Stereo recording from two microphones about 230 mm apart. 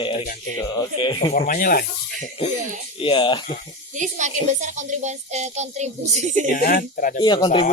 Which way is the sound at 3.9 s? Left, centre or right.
Right.